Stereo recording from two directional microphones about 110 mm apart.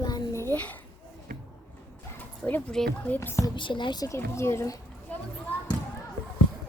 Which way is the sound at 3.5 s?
45° left (ahead or behind).